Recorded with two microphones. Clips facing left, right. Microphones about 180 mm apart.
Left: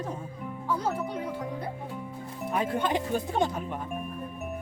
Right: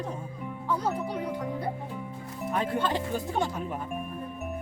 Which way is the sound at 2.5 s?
15° left (ahead or behind).